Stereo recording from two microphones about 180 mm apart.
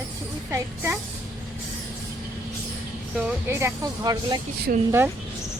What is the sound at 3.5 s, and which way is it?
Speech, 15° right (ahead or behind).